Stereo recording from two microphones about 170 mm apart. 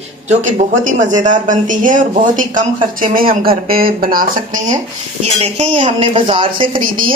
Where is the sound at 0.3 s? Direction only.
50° right (ahead or behind).